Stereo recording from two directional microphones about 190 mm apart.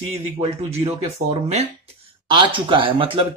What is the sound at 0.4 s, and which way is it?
Speech, 35° right (ahead or behind).